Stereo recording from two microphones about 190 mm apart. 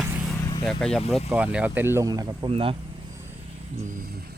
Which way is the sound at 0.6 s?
Centre (ahead or behind).